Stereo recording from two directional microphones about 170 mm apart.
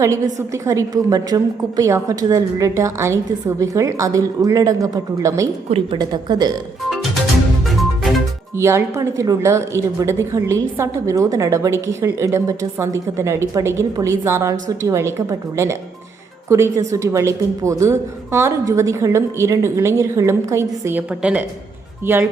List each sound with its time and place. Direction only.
0.0 s a woman's voice: 20° right (ahead or behind)
7.7 s music: centre (ahead or behind)
8.5 s a woman's voice: 15° right (ahead or behind)